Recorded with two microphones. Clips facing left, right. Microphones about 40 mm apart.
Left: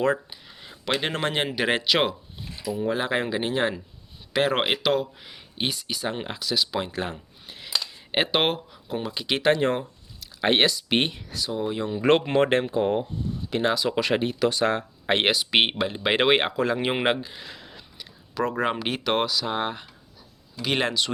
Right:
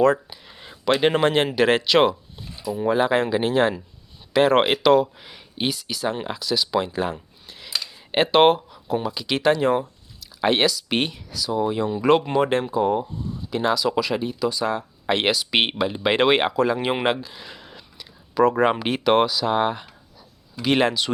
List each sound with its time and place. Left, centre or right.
0.0 s speech: centre
0.4 s a sound: centre
1.5 s speech: centre
2.6 s speech: centre
2.9 s speech: centre
9.0 s speech: centre
11.5 s speech: centre
12.4 s speech: left
14.0 s speech: left
15.0 s speech: left
15.6 s speech: centre
17.4 s a sound: centre
18.4 s speech: centre